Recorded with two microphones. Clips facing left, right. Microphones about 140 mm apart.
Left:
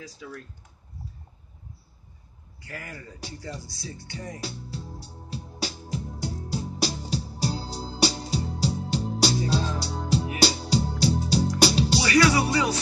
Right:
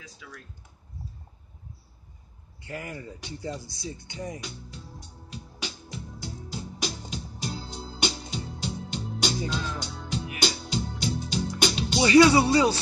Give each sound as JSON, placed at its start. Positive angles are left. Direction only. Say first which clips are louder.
{"t": 2.6, "sound": "speech", "louder": "right 3 dB", "side_deg": -20}
{"t": 4.4, "sound": "music", "louder": "left 5 dB", "side_deg": 35}
{"t": 12.0, "sound": "speech", "louder": "right 6 dB", "side_deg": -25}